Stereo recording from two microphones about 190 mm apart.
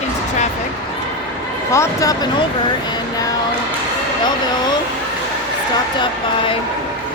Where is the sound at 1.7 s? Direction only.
20° left (ahead or behind).